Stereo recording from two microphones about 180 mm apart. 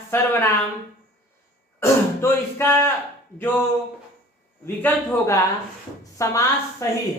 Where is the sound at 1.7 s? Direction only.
15° left (ahead or behind).